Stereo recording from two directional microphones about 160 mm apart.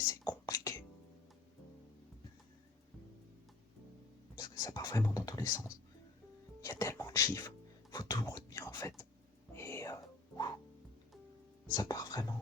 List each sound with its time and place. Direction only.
0.1 s a sound: 25° left (ahead or behind)
4.4 s speech: 25° left (ahead or behind)
6.6 s music: 20° left (ahead or behind)
9.5 s whispering: 15° left (ahead or behind)
11.7 s whispering: 25° left (ahead or behind)